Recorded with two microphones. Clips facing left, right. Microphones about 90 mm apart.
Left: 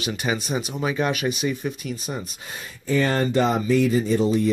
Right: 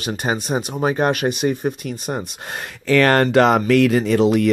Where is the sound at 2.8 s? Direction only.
80° right.